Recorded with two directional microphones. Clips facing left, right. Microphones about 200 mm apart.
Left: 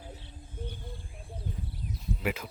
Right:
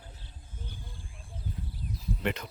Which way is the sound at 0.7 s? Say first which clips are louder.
Left 4 dB; 60° left (ahead or behind).